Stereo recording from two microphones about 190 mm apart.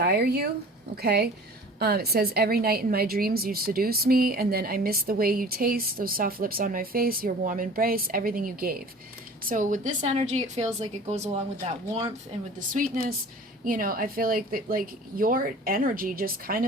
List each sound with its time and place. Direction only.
0.0 s a woman's voice: 55° right (ahead or behind); by 11.3 s 35° right (ahead or behind)
12.5 s a woman's voice: 45° right (ahead or behind)